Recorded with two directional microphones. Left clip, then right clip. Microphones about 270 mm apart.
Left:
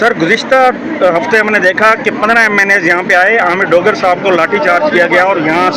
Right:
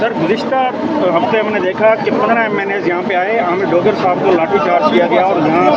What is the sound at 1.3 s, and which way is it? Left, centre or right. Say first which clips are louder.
Speech: left 6 dB; left.